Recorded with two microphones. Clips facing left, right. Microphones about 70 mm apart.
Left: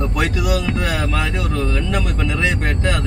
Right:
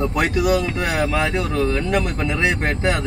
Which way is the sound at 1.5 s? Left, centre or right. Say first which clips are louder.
Right 3 dB; right.